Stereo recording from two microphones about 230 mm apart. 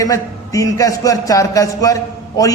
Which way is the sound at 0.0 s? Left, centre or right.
Centre.